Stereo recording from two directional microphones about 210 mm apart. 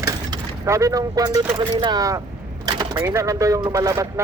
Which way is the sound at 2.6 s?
20° right (ahead or behind).